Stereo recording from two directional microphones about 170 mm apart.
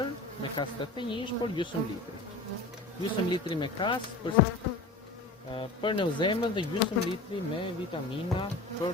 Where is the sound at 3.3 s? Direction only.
30° left (ahead or behind).